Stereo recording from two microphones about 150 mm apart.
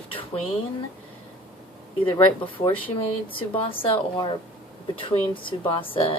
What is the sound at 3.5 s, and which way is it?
A woman's voice, 35° left (ahead or behind).